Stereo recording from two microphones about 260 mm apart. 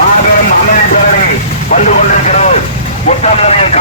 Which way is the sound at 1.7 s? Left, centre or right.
Left.